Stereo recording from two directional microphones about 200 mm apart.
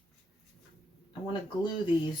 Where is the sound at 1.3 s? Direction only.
25° left (ahead or behind).